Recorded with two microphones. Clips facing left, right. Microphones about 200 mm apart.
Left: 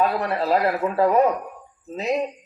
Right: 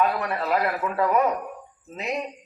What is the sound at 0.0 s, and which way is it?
A man's voice, 35° left (ahead or behind).